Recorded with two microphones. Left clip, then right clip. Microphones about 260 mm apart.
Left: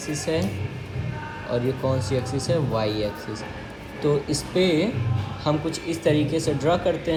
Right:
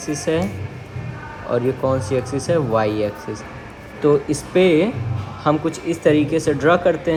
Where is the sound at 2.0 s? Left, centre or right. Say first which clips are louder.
Right 5 dB; centre.